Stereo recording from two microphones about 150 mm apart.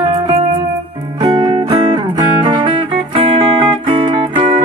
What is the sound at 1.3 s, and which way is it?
Music, 35° right (ahead or behind).